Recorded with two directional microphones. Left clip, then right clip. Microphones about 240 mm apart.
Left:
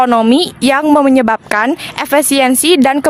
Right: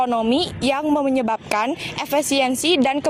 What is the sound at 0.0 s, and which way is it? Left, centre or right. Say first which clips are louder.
Speech: left 9 dB; left.